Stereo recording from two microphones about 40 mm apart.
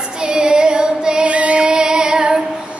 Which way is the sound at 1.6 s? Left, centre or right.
Right.